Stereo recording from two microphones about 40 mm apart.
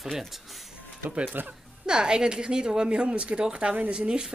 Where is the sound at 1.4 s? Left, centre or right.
Right.